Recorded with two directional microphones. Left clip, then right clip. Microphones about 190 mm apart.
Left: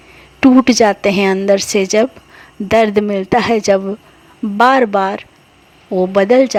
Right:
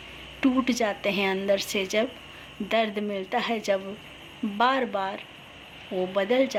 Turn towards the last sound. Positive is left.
turn(degrees=45)  # may be behind; listen again after turning